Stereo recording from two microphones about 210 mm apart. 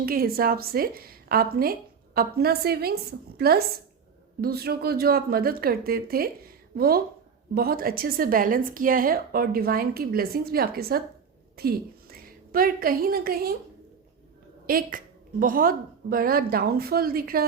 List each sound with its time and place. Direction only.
0.0 s a woman's voice: 45° right (ahead or behind)
14.7 s a woman's voice: 45° right (ahead or behind)